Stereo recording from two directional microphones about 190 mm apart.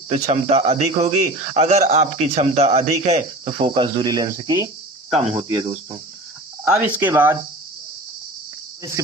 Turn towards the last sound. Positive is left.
turn(degrees=-10)  # may be behind; listen again after turning